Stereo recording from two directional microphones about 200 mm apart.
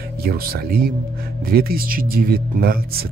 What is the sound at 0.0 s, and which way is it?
Speech, 50° right (ahead or behind).